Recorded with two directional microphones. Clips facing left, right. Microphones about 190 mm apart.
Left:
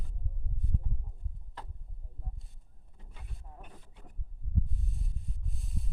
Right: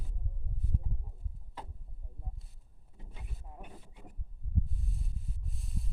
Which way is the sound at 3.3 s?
10° right (ahead or behind).